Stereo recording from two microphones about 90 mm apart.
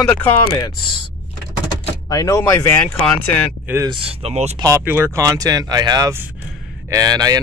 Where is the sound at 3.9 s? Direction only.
90° right.